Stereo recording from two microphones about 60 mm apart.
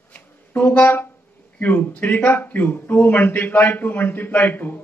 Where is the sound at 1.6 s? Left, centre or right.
Left.